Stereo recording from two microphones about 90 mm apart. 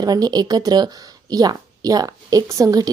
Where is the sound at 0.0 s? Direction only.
45° right (ahead or behind).